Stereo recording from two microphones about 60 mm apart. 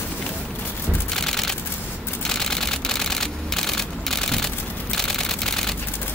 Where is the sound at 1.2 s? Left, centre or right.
Centre.